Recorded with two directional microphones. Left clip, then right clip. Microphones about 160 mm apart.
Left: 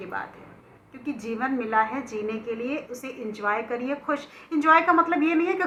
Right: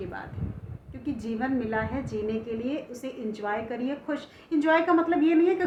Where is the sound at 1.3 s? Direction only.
35° right (ahead or behind).